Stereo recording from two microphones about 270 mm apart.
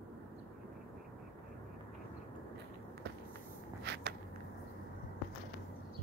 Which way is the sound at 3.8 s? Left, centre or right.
Right.